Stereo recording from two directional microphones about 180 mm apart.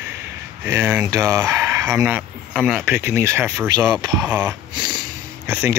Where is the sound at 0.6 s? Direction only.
15° right (ahead or behind).